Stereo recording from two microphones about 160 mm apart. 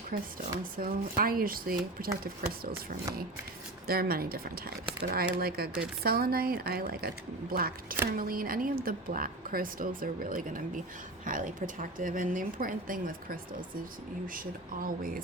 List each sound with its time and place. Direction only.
0.1 s a woman's voice: 70° right (ahead or behind)
3.8 s a woman's voice: 70° right (ahead or behind)